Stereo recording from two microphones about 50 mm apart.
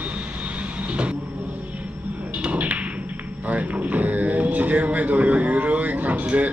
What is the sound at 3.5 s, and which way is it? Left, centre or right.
Music, right.